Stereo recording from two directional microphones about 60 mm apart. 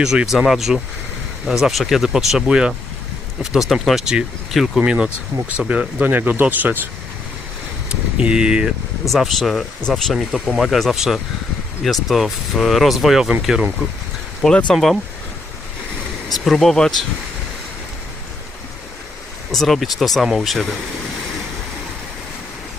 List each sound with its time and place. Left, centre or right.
0.0 s speech: centre
3.7 s speech: centre
4.0 s speech: centre
4.5 s speech: centre
4.9 s speech: right
7.9 s vehicle: centre
9.0 s speech: centre
14.4 s speech: centre
16.3 s speech: centre
19.5 s speech: centre